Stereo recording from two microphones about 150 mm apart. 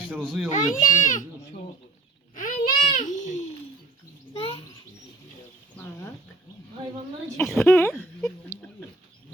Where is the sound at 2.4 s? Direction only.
60° left (ahead or behind).